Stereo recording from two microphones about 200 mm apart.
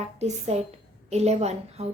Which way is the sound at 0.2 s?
35° right (ahead or behind).